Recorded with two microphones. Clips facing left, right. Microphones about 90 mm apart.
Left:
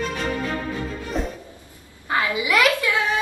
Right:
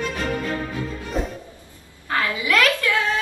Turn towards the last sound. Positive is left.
turn(degrees=15)  # may be behind; listen again after turning